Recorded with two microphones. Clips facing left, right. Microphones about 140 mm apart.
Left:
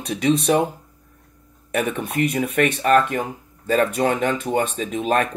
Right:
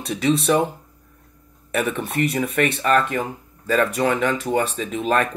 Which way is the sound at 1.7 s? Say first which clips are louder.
Even; 40° left (ahead or behind).